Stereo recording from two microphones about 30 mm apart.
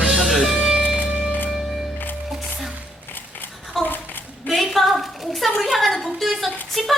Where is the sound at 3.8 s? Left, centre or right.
Centre.